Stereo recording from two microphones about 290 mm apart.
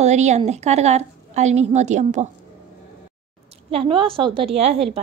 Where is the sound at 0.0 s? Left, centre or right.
Right.